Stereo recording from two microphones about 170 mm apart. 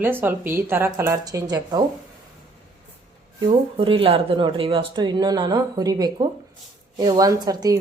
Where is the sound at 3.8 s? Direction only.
30° right (ahead or behind).